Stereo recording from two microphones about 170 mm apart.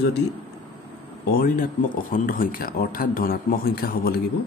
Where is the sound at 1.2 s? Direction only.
55° left (ahead or behind).